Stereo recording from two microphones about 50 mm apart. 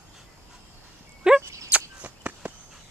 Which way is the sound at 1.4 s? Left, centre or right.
Right.